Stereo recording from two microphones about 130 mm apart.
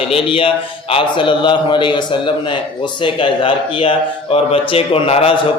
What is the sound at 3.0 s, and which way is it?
Speech, 40° left (ahead or behind).